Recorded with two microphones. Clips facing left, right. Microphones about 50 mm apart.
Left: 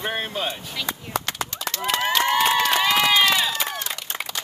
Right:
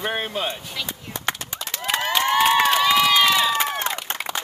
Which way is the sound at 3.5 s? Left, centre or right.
Right.